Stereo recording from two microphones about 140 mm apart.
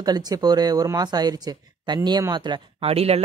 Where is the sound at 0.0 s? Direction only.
30° right (ahead or behind).